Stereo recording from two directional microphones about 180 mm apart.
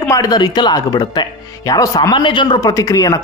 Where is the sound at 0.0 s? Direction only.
20° left (ahead or behind).